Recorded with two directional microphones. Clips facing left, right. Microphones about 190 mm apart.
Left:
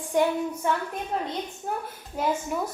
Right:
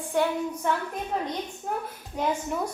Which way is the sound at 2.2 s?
5° left (ahead or behind).